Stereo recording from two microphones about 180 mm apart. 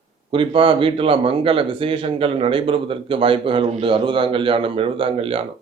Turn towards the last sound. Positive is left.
turn(degrees=-30)  # may be behind; listen again after turning